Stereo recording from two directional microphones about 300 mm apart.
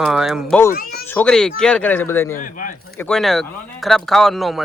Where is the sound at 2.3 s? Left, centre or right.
Left.